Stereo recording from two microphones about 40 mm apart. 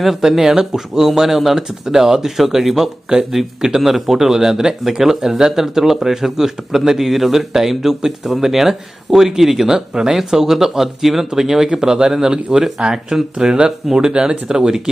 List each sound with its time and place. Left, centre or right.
0.0 s speech: centre